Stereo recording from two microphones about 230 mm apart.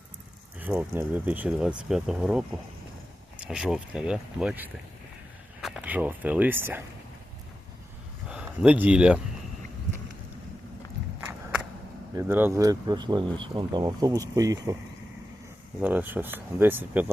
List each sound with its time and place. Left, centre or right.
0.6 s speech: centre
8.3 s speech: centre
12.1 s speech: centre
15.8 s speech: centre